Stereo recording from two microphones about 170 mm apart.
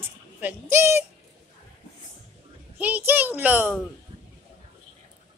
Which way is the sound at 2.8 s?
10° right (ahead or behind).